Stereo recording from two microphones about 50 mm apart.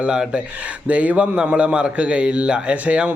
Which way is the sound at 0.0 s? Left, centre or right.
Right.